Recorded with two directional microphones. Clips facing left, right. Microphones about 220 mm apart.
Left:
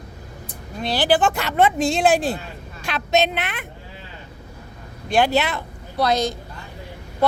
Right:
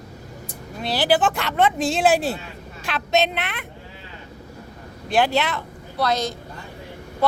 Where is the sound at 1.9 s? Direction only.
5° right (ahead or behind).